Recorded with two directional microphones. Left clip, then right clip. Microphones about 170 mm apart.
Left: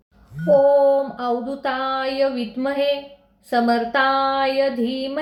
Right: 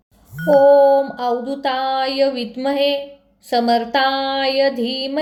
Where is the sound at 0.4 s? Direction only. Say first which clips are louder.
Right 3 dB; 90° right.